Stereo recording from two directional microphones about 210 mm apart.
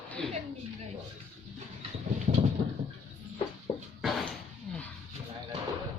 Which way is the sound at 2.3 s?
35° right (ahead or behind).